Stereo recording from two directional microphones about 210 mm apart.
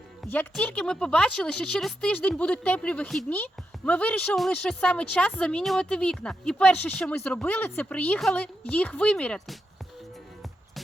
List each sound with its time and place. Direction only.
0.3 s a woman's voice: 5° left (ahead or behind)